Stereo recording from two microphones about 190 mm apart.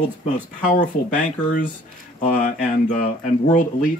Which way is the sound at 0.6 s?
40° left (ahead or behind).